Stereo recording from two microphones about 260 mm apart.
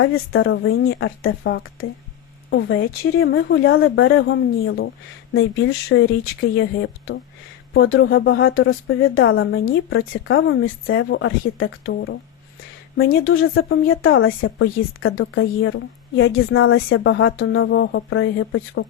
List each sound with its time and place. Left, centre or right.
0.0 s speech: left